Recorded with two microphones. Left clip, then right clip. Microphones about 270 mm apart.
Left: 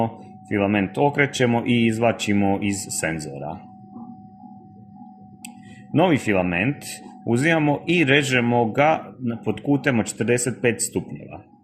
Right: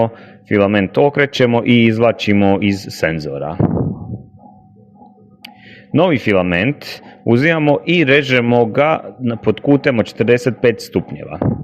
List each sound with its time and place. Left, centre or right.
0.0 s a man's voice: right
5.9 s speech: right